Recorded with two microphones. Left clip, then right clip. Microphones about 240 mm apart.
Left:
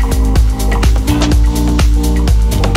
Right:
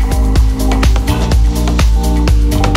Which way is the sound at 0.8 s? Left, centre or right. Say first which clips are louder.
Left 1 dB; centre.